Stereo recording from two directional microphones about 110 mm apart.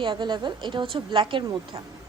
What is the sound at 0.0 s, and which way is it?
A woman's voice, 45° right (ahead or behind).